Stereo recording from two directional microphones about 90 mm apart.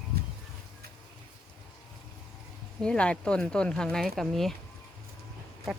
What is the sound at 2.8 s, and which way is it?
Speech, 10° left (ahead or behind).